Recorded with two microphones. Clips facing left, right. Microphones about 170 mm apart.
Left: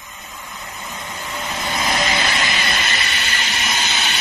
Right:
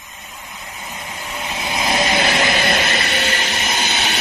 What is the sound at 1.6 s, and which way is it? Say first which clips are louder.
Train: right 2 dB; 10° right (ahead or behind).